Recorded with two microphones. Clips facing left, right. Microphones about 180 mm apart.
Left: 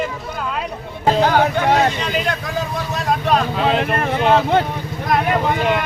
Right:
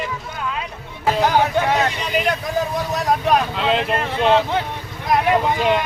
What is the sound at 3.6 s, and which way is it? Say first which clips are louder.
Speech: left 2 dB; 50° left (ahead or behind).